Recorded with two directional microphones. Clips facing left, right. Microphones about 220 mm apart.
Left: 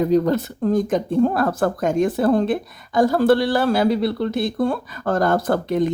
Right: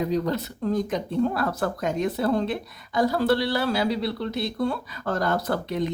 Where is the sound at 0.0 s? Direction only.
50° left (ahead or behind).